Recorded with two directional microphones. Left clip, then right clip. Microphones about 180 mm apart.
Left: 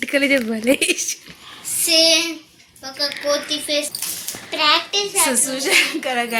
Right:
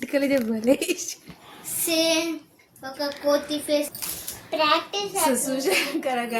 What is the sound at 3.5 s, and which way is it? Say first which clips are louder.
Speech: left 3 dB; 70° right (ahead or behind).